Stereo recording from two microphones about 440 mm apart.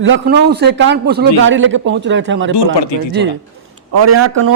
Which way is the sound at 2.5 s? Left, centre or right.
Left.